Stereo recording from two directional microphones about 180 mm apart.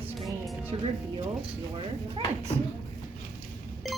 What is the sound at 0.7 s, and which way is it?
Speech, 30° right (ahead or behind).